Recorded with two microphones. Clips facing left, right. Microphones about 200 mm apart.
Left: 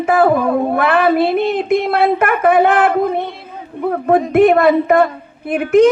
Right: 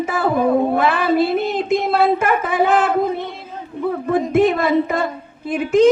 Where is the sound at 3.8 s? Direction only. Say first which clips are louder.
Left 4 dB; 55° left (ahead or behind).